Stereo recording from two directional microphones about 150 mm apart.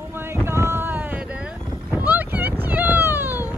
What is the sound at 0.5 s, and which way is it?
Boat, 15° right (ahead or behind).